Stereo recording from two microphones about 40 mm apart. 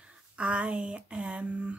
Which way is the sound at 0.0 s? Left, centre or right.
Right.